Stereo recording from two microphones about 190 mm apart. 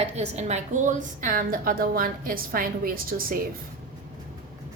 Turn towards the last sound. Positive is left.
turn(degrees=-50)  # may be behind; listen again after turning